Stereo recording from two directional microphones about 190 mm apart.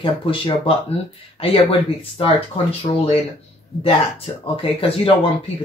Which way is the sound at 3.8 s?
30° left (ahead or behind).